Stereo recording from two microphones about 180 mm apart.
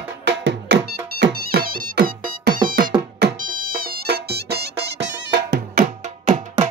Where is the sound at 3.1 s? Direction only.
60° right (ahead or behind).